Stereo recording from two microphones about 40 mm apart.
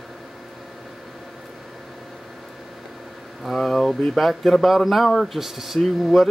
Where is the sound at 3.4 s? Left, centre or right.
Centre.